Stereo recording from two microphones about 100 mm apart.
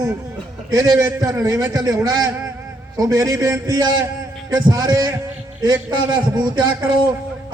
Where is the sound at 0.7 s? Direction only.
35° right (ahead or behind).